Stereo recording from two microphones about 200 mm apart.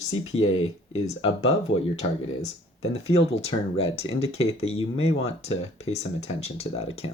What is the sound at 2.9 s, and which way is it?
Speech, 30° left (ahead or behind).